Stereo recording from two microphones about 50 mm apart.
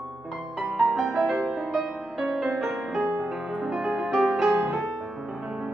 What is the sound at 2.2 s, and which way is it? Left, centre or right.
Music, centre.